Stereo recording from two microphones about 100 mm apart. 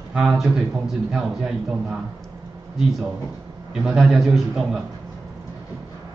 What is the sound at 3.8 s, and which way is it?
A man's voice, 5° right (ahead or behind).